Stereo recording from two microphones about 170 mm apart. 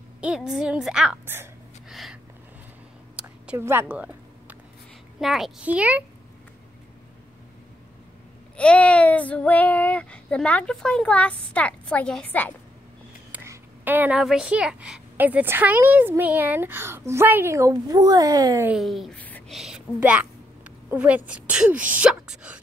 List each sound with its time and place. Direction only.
0.2 s a woman's voice: 5° right (ahead or behind)
1.9 s a sound: centre (ahead or behind)
3.2 s a sound: 10° right (ahead or behind)
5.2 s a woman's voice: centre (ahead or behind)
8.5 s child singing: 10° left (ahead or behind)
13.3 s a woman's voice: 10° right (ahead or behind)
18.7 s speech: centre (ahead or behind)
19.5 s a woman's voice: 5° right (ahead or behind)